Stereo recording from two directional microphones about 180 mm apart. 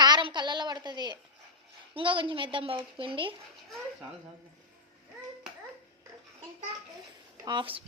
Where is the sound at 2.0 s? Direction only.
30° right (ahead or behind).